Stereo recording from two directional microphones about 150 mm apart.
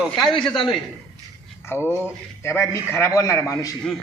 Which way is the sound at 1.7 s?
15° left (ahead or behind).